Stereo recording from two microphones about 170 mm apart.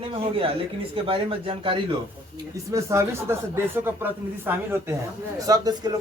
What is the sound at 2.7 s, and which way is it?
Speech, 15° right (ahead or behind).